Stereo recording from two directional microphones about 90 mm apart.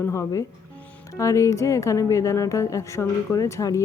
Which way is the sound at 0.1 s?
35° left (ahead or behind).